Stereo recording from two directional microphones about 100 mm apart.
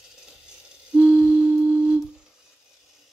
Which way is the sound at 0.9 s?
10° right (ahead or behind).